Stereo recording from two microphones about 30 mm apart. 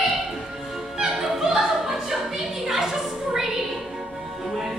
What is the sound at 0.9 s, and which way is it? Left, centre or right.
Opera, right.